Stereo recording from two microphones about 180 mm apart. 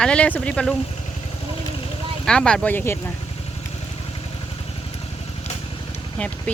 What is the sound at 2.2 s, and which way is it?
Speech, 5° left (ahead or behind).